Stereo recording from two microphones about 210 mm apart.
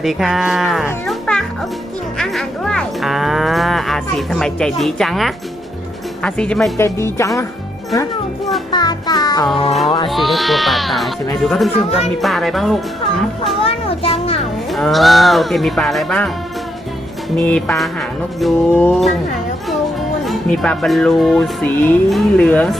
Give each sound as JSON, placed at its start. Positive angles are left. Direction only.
{"t": 0.0, "sound": "moo", "side_deg": 0}
{"t": 1.0, "sound": "music", "side_deg": 5}
{"t": 2.1, "sound": "moo", "side_deg": 5}
{"t": 6.7, "sound": "speech", "side_deg": 15}
{"t": 8.7, "sound": "music", "side_deg": 20}
{"t": 10.1, "sound": "moo", "side_deg": 0}
{"t": 11.9, "sound": "speech", "side_deg": 30}
{"t": 12.2, "sound": "moo", "side_deg": 0}
{"t": 13.6, "sound": "music", "side_deg": 25}
{"t": 14.7, "sound": "moo", "side_deg": 0}
{"t": 17.3, "sound": "moo", "side_deg": 5}
{"t": 20.2, "sound": "moo", "side_deg": 0}